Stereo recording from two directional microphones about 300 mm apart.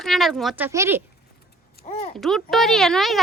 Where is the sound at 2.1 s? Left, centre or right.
Centre.